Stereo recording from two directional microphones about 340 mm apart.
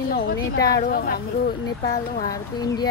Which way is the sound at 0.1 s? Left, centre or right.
Left.